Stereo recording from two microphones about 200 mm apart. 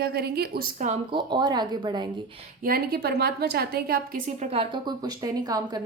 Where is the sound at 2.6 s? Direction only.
50° right (ahead or behind).